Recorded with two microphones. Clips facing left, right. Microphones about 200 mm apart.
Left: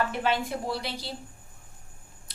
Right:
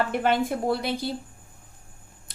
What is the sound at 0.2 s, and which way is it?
Speech, 55° right (ahead or behind).